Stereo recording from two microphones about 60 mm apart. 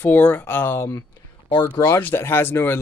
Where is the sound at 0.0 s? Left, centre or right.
Left.